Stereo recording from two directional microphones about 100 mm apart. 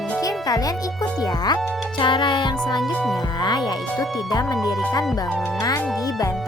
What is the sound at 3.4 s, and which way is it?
Speech, 45° left (ahead or behind).